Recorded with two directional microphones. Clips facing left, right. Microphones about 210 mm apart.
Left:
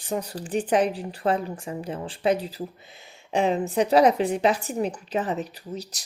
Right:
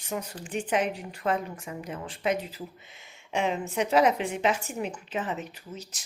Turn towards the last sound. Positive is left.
turn(degrees=35)  # may be behind; listen again after turning